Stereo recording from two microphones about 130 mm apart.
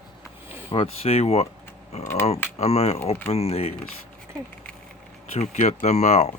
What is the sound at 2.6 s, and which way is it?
Speech, 50° left (ahead or behind).